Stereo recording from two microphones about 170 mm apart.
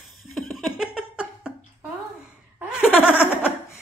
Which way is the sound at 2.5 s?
5° right (ahead or behind).